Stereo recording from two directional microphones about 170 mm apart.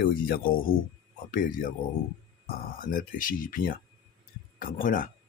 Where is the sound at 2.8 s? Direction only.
55° left (ahead or behind).